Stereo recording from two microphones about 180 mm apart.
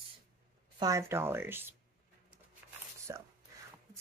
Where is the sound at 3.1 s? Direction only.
20° right (ahead or behind).